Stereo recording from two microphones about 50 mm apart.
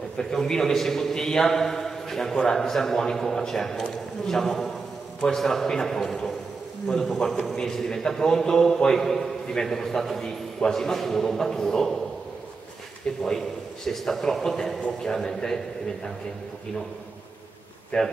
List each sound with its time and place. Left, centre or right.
0.2 s a man's voice: centre
13.0 s a man's voice: centre
17.9 s a man's voice: centre